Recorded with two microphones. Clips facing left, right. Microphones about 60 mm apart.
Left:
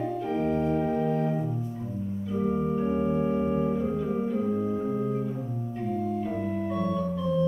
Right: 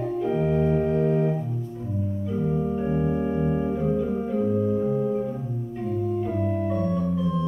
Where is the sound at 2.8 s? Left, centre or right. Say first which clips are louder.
Right 1 dB; centre.